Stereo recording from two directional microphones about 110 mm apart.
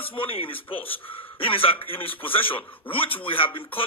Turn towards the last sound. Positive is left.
turn(degrees=50)  # may be behind; listen again after turning